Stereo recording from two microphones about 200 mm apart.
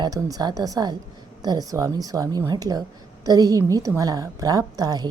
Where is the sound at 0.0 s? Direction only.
20° right (ahead or behind).